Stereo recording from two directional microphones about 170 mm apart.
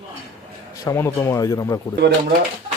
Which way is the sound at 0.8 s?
15° left (ahead or behind).